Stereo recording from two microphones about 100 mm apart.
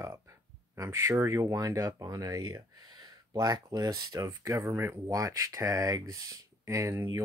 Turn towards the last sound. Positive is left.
turn(degrees=-30)  # may be behind; listen again after turning